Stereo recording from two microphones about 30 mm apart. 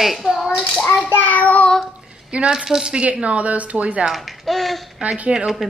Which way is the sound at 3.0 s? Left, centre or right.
Right.